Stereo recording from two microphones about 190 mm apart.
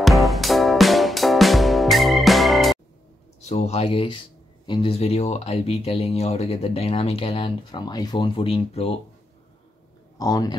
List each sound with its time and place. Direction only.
0.0 s music: centre (ahead or behind)
3.4 s speech: 35° left (ahead or behind)
10.1 s speech: 20° left (ahead or behind)